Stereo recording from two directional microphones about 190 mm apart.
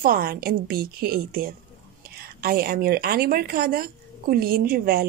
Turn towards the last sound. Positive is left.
turn(degrees=-50)  # may be behind; listen again after turning